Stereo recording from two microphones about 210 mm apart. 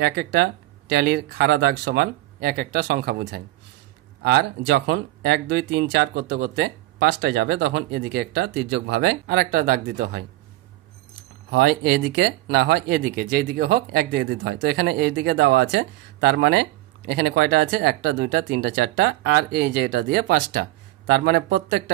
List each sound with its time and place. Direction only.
0.0 s speech: 50° right (ahead or behind)
11.5 s speech: 50° right (ahead or behind)